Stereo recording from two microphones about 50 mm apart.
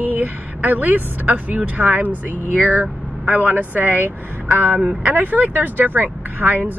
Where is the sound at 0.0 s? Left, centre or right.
Right.